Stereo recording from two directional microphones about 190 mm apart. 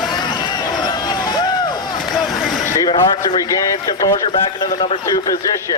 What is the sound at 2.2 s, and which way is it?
Vehicle, centre (ahead or behind).